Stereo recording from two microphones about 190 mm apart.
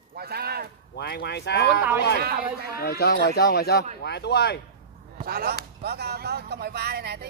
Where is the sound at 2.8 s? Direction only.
55° left (ahead or behind).